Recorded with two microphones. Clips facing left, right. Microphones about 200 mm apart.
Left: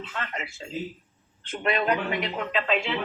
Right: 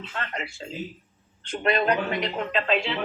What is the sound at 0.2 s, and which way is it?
Speech, centre (ahead or behind).